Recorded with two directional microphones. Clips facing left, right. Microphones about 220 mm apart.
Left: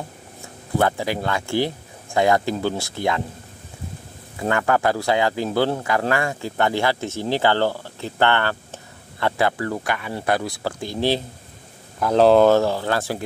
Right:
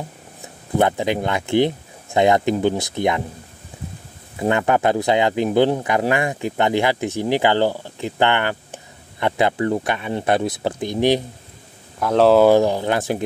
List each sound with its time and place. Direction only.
0.4 s speech: 20° right (ahead or behind)
4.4 s speech: 20° right (ahead or behind)
12.0 s speech: centre (ahead or behind)
12.4 s speech: 15° right (ahead or behind)